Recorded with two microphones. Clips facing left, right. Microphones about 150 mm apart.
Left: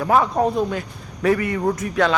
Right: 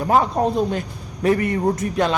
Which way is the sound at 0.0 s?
30° right (ahead or behind).